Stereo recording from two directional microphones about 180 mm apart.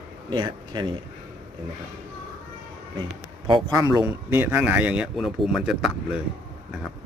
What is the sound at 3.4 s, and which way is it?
Speech, 25° right (ahead or behind).